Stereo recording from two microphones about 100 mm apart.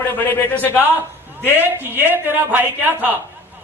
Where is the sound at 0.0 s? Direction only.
20° left (ahead or behind).